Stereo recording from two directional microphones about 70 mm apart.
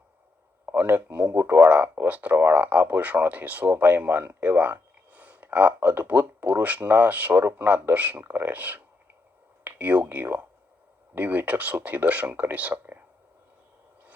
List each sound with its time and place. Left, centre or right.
0.6 s speech: right
1.4 s speech: right
2.0 s speech: right